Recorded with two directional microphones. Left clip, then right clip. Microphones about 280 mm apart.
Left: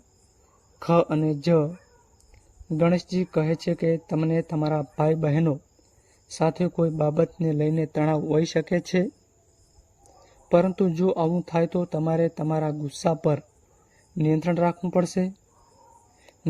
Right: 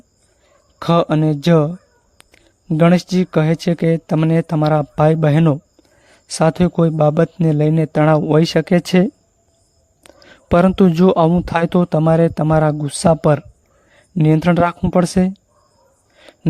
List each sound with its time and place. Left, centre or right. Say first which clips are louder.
0.8 s speech: right 6 dB; right
10.5 s speech: right 8 dB; right